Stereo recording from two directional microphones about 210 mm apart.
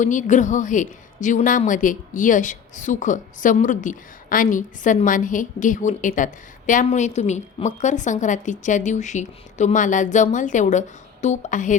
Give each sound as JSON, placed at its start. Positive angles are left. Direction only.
{"t": 0.0, "sound": "a woman's voice", "side_deg": 35}